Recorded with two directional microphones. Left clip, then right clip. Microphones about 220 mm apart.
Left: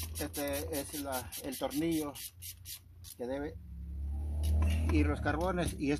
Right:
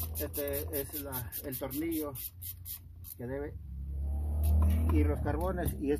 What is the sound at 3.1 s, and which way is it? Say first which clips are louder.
Speech: left 1 dB; 35° left (ahead or behind).